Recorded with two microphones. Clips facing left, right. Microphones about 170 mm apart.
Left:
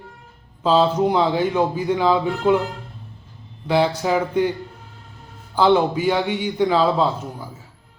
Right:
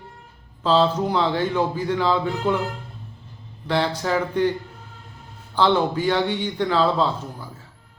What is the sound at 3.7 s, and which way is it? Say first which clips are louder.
Speech: left 4 dB; 10° left (ahead or behind).